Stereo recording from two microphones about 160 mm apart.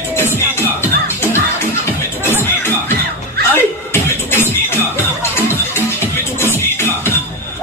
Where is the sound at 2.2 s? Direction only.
15° left (ahead or behind).